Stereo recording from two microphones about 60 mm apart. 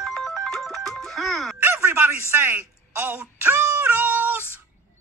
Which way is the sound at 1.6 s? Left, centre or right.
Right.